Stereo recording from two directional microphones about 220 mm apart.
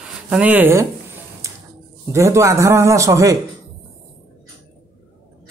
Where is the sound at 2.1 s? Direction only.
15° right (ahead or behind).